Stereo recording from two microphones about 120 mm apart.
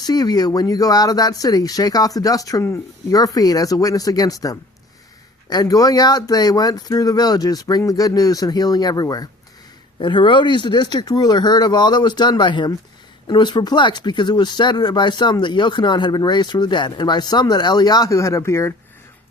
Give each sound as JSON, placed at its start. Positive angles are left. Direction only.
{"t": 0.0, "sound": "speech", "side_deg": 35}
{"t": 10.0, "sound": "speech", "side_deg": 45}